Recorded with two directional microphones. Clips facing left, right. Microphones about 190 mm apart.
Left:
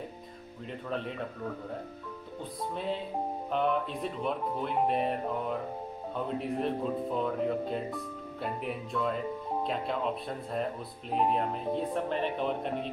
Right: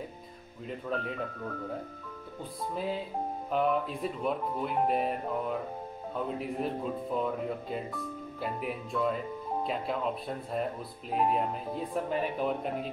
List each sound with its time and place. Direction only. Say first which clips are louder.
0.7 s speech: right 1 dB; centre (ahead or behind)
2.7 s speech: right 1 dB; 5° right (ahead or behind)